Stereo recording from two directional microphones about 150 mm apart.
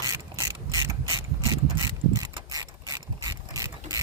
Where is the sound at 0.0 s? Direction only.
20° right (ahead or behind).